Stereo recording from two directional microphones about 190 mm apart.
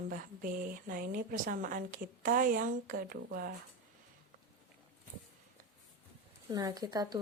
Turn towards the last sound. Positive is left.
turn(degrees=-20)  # may be behind; listen again after turning